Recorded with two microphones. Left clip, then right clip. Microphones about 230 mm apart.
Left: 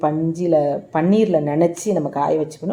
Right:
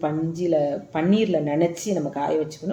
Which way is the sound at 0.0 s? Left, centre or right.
Left.